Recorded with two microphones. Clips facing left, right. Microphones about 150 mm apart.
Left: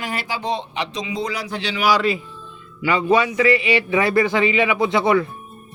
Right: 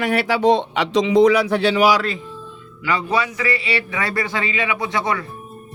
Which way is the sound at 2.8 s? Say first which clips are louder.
Left 4 dB; 20° left (ahead or behind).